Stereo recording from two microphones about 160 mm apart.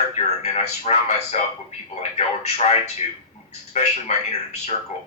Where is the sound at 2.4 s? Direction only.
40° left (ahead or behind).